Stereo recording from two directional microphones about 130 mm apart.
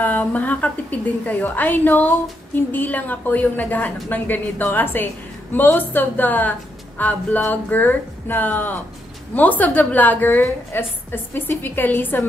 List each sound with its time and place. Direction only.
0.0 s a woman's voice: 10° left (ahead or behind)